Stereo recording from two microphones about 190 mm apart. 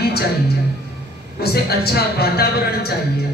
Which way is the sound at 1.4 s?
55° left (ahead or behind).